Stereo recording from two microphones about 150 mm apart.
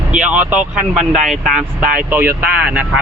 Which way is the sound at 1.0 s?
55° right (ahead or behind).